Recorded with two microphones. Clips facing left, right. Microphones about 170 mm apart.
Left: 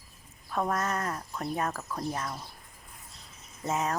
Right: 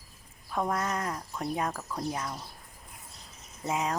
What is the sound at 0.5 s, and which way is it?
Speech, 10° right (ahead or behind).